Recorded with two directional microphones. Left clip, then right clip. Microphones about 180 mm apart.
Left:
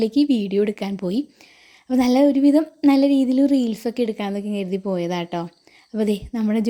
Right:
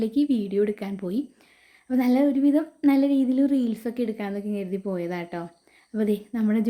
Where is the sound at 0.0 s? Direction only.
30° left (ahead or behind).